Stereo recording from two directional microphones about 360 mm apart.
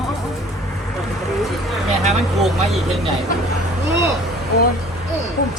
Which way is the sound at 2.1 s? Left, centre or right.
Centre.